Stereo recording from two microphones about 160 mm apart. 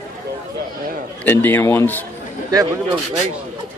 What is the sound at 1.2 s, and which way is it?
Speech, 15° left (ahead or behind).